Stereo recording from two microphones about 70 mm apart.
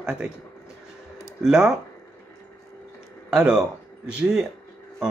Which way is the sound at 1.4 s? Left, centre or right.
Centre.